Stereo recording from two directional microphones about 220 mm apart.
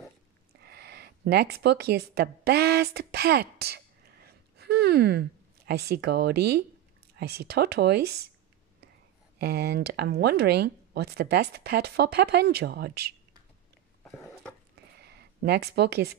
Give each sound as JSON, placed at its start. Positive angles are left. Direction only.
{"t": 0.7, "sound": "speech", "side_deg": -45}
{"t": 9.4, "sound": "speech", "side_deg": -45}
{"t": 14.0, "sound": "a sound", "side_deg": 5}
{"t": 15.0, "sound": "speech", "side_deg": -45}